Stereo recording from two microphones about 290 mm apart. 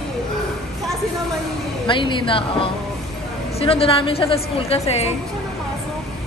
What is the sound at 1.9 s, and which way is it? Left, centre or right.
A woman's voice, centre.